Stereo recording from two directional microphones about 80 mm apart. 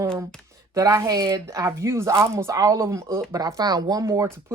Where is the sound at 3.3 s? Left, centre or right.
Right.